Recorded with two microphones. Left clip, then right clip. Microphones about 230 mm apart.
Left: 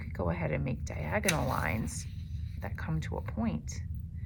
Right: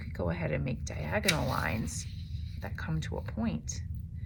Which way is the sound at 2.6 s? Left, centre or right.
Left.